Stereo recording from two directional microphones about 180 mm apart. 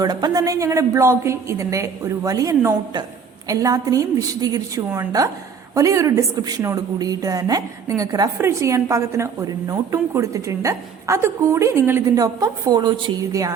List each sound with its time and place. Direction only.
0.0 s a woman's voice: 20° right (ahead or behind)